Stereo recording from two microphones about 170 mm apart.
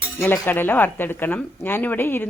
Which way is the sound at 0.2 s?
10° left (ahead or behind).